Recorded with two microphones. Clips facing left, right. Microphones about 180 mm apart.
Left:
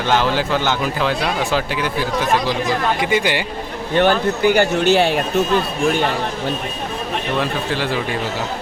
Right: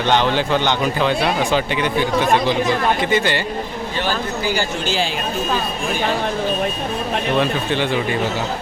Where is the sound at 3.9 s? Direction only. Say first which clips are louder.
Left 8 dB; 60° left (ahead or behind).